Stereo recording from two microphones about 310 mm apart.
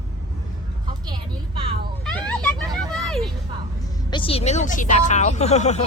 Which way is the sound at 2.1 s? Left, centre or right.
Centre.